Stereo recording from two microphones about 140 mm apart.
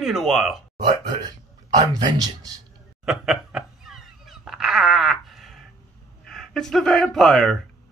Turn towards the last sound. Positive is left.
turn(degrees=0)  # may be behind; listen again after turning